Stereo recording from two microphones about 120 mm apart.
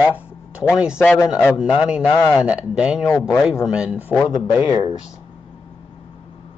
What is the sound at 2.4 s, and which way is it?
Speech, 10° right (ahead or behind).